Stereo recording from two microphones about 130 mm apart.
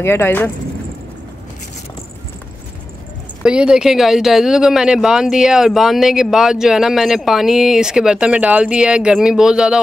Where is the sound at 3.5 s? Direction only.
5° right (ahead or behind).